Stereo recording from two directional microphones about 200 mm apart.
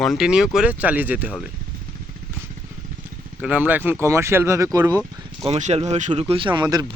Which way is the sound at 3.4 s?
10° right (ahead or behind).